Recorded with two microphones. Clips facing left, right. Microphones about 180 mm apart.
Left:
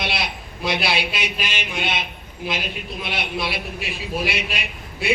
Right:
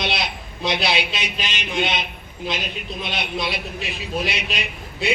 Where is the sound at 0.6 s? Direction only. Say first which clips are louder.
Right 1 dB; 20° right (ahead or behind).